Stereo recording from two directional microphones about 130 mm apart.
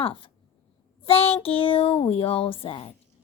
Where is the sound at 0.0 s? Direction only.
45° left (ahead or behind).